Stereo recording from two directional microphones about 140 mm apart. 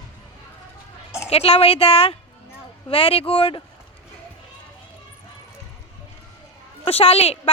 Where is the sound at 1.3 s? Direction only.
45° left (ahead or behind).